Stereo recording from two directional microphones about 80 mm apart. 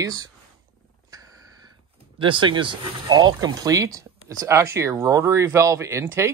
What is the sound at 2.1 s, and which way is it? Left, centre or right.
Speech, right.